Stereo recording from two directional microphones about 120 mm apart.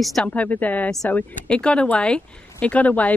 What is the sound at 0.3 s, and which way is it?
A woman's voice, 15° left (ahead or behind).